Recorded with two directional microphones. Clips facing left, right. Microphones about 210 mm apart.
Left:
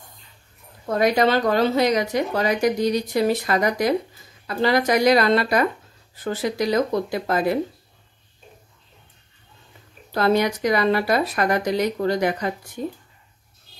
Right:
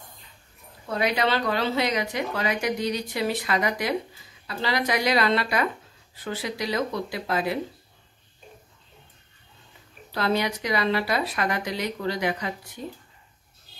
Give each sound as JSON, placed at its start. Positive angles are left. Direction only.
{"t": 0.8, "sound": "a woman's voice", "side_deg": 45}
{"t": 10.1, "sound": "a woman's voice", "side_deg": 45}